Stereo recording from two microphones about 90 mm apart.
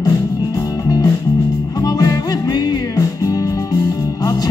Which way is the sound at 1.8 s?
45° left (ahead or behind).